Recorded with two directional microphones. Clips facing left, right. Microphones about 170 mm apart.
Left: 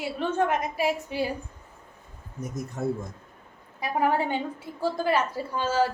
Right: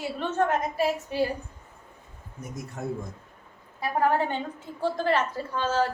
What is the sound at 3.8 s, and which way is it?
A woman's voice, 15° left (ahead or behind).